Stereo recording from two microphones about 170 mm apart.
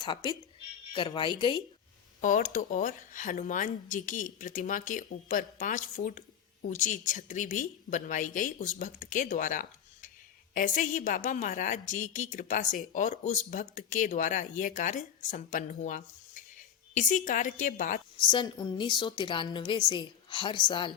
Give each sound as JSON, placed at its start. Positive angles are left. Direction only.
{"t": 0.0, "sound": "a woman's voice", "side_deg": 25}
{"t": 2.2, "sound": "speech", "side_deg": 50}
{"t": 18.2, "sound": "a woman's voice", "side_deg": 25}